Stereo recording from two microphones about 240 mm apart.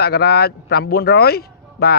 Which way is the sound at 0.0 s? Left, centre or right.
Left.